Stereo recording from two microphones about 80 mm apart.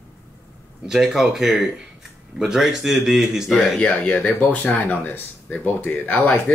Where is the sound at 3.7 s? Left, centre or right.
Left.